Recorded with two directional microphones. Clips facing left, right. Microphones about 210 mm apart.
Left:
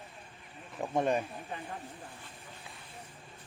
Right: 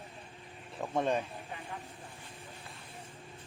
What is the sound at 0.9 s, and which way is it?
Speech, 10° left (ahead or behind).